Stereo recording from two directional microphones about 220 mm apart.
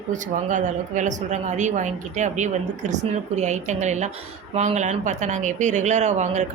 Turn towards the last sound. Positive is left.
turn(degrees=-30)  # may be behind; listen again after turning